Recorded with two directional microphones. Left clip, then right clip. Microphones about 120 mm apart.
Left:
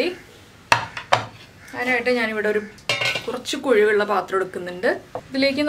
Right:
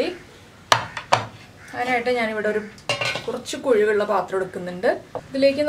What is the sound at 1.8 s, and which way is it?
Speech, 10° left (ahead or behind).